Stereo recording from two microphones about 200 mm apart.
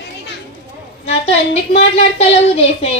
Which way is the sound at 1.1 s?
30° left (ahead or behind).